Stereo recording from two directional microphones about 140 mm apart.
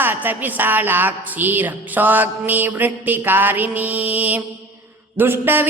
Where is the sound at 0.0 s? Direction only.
15° right (ahead or behind).